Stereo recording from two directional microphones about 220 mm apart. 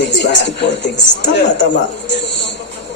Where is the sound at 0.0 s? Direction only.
50° left (ahead or behind).